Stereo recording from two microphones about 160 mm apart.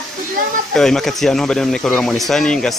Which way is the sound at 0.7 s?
5° left (ahead or behind).